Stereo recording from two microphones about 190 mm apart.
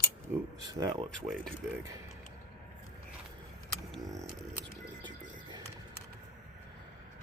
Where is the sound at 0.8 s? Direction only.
30° right (ahead or behind).